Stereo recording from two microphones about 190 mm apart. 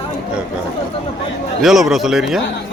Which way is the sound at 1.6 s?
Centre (ahead or behind).